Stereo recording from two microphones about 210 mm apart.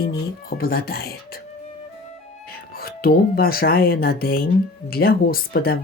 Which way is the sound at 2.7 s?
45° left (ahead or behind).